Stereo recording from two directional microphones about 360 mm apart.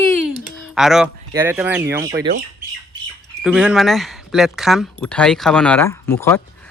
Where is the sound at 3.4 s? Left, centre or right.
Centre.